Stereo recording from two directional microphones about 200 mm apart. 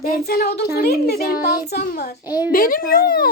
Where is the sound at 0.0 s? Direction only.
50° left (ahead or behind).